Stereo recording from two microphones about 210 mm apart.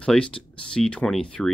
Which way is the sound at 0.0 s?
5° left (ahead or behind).